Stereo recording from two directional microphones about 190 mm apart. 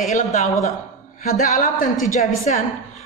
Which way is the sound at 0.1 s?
35° left (ahead or behind).